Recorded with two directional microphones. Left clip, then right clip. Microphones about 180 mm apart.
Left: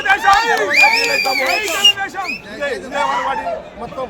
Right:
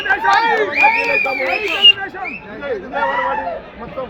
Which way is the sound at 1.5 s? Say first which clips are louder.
Right 4 dB; 30° left (ahead or behind).